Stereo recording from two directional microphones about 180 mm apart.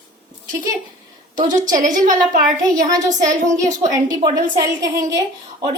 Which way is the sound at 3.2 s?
45° right (ahead or behind).